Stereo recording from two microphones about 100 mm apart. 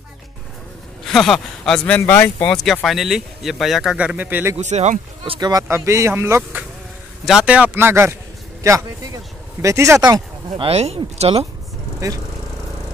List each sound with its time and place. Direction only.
1.0 s a man's voice: 5° left (ahead or behind)
2.0 s speech: 20° left (ahead or behind)
2.4 s speech: 5° left (ahead or behind)
3.9 s speech: 10° right (ahead or behind)
4.7 s speech: 70° right (ahead or behind)
5.4 s a man's voice: 40° right (ahead or behind)
7.2 s a man's voice: 10° right (ahead or behind); by 10.0 s 30° right (ahead or behind)
10.6 s speech: 85° right